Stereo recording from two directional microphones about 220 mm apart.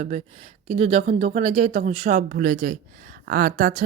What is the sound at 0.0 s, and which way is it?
Speech, 30° right (ahead or behind).